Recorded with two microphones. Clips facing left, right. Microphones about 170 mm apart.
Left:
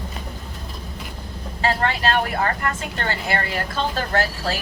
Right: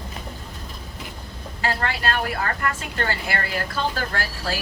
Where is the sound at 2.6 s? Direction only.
25° left (ahead or behind).